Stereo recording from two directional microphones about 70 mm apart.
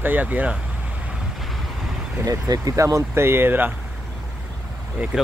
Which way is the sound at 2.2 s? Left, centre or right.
Right.